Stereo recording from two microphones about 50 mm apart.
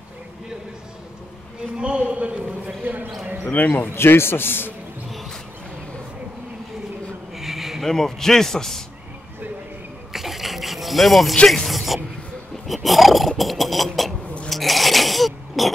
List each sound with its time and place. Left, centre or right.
1.8 s a sound: right
3.4 s speech: left
3.9 s a man's voice: left
7.3 s a sound: centre
7.9 s a man's voice: centre
10.1 s filing: centre
11.4 s speech: centre
12.6 s roar: centre
13.4 s a sound: centre